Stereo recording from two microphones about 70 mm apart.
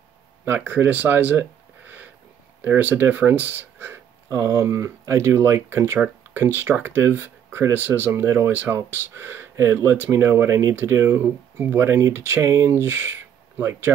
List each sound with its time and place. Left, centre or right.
0.5 s speech: right
2.6 s speech: right
4.3 s speech: right